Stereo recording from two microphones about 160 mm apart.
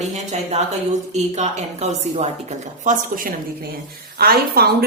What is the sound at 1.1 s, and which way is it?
A woman's voice, 45° right (ahead or behind).